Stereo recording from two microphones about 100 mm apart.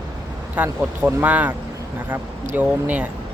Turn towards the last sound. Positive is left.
turn(degrees=-15)  # may be behind; listen again after turning